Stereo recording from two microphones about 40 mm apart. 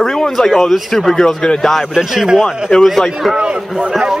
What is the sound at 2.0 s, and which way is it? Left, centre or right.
Speech, centre.